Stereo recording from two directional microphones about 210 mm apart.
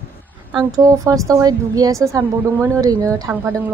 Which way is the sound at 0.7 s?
15° right (ahead or behind).